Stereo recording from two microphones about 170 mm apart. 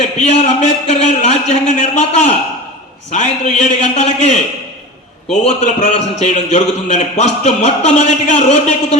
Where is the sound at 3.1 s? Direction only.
45° left (ahead or behind).